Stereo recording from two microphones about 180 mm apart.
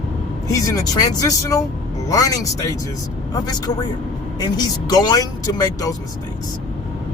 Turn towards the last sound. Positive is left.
turn(degrees=20)  # may be behind; listen again after turning